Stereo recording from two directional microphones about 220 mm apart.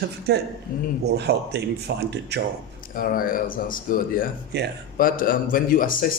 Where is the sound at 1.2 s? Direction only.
50° right (ahead or behind).